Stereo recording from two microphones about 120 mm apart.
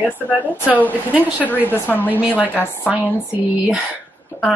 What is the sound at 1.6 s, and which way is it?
Speech, 15° left (ahead or behind).